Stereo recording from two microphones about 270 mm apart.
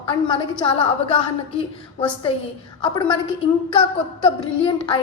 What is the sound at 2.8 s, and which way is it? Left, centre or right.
Speech, centre.